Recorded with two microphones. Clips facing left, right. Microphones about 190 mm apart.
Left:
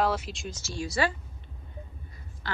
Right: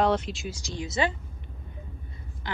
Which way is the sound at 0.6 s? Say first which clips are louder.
Even; 20° right (ahead or behind).